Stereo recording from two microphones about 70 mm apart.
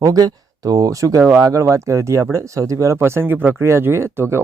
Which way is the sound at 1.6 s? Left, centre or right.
Right.